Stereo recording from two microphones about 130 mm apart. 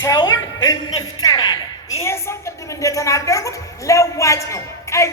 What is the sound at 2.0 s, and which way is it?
A woman's voice, 20° left (ahead or behind).